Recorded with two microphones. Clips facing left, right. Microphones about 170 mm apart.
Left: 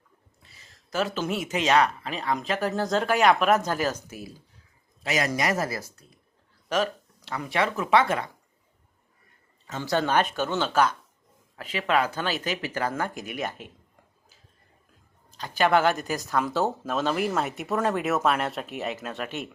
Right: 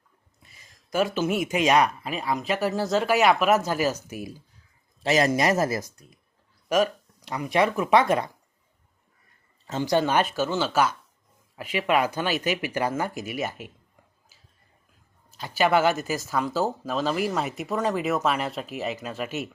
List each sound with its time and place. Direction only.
0.4 s speech: 10° right (ahead or behind)
5.0 s speech: 30° right (ahead or behind)
9.8 s speech: 15° right (ahead or behind)
15.3 s speech: 5° right (ahead or behind)